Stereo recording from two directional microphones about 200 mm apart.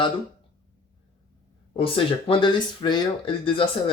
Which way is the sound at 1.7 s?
25° left (ahead or behind).